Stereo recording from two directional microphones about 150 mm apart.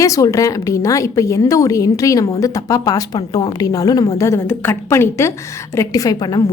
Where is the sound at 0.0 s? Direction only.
20° left (ahead or behind).